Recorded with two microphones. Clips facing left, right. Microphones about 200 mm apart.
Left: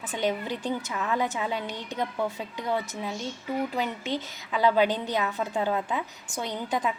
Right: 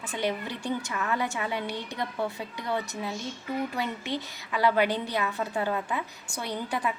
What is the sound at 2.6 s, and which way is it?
Speech, 15° left (ahead or behind).